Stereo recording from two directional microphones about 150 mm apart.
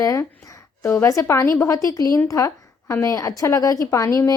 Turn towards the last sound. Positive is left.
turn(degrees=20)  # may be behind; listen again after turning